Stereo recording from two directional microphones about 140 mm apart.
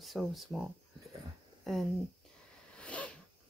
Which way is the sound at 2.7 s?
10° left (ahead or behind).